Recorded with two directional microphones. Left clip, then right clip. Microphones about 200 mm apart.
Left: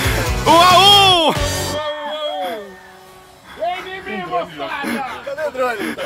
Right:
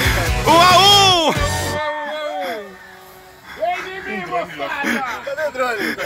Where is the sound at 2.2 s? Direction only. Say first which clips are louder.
Left 1 dB; centre (ahead or behind).